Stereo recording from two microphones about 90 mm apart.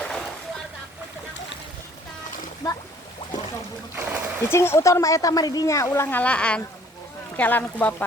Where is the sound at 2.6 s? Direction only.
45° left (ahead or behind).